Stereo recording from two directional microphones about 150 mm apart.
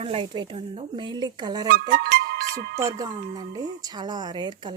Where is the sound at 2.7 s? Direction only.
20° right (ahead or behind).